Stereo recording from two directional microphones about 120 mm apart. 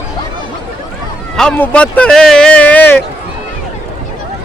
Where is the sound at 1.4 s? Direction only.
10° left (ahead or behind).